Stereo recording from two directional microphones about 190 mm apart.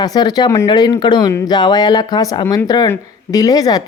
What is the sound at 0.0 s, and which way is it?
Speech, 20° left (ahead or behind).